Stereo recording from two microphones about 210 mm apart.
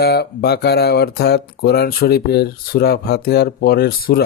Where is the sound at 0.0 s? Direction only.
50° left (ahead or behind).